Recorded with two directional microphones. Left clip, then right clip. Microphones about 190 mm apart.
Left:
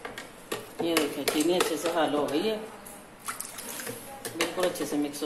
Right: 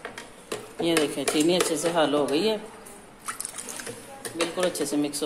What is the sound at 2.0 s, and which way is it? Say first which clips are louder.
Speech: right 4 dB; 60° right (ahead or behind).